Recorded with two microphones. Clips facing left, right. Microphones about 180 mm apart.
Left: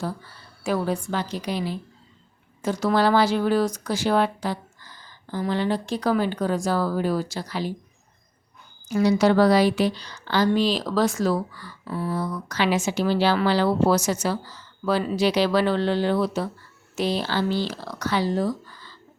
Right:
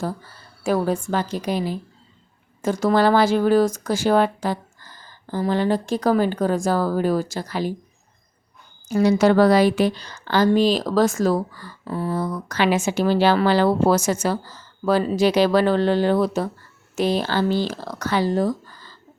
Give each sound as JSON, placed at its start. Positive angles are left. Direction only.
{"t": 0.0, "sound": "a woman's voice", "side_deg": -45}
{"t": 8.9, "sound": "a woman's voice", "side_deg": -45}